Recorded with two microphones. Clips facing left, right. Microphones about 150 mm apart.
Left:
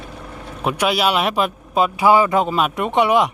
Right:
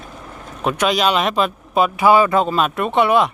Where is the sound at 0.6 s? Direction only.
10° left (ahead or behind).